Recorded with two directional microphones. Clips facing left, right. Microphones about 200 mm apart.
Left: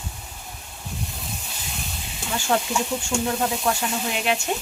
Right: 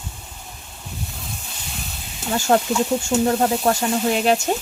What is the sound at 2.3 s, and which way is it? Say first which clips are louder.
Speech: right 6 dB; 45° right (ahead or behind).